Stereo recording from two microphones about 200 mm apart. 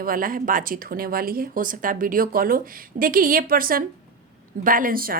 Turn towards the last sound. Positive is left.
turn(degrees=-45)  # may be behind; listen again after turning